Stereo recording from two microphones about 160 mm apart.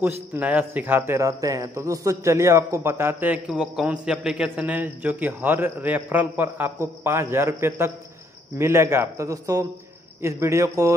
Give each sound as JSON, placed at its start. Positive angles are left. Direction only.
{"t": 0.0, "sound": "speech", "side_deg": -10}